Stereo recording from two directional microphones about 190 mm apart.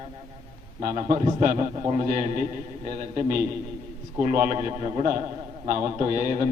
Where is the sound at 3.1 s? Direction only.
45° right (ahead or behind).